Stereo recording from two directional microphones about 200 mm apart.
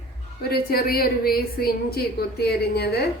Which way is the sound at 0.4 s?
50° left (ahead or behind).